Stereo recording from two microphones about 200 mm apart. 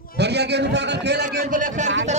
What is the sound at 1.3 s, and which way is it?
Speech, 40° right (ahead or behind).